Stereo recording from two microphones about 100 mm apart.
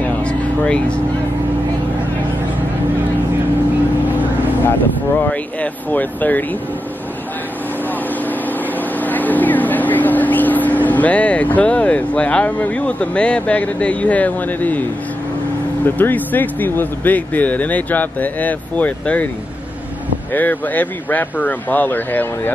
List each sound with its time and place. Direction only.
0.2 s a sound: 10° left (ahead or behind)
5.2 s speech: 15° left (ahead or behind)
9.0 s speech: 15° left (ahead or behind)
20.3 s speech: 15° left (ahead or behind)